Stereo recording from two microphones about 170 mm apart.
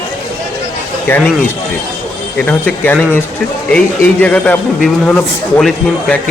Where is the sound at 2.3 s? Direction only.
10° left (ahead or behind).